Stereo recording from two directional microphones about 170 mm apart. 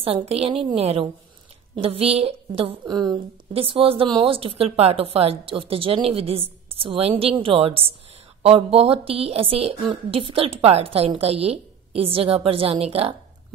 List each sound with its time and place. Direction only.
0.0 s a woman's voice: 35° right (ahead or behind)